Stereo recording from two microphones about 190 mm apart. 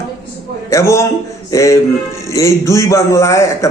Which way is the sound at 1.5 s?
15° left (ahead or behind).